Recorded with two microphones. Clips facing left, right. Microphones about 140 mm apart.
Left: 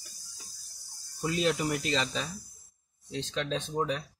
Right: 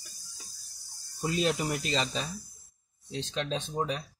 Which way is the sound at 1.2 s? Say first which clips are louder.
Even; 25° right (ahead or behind).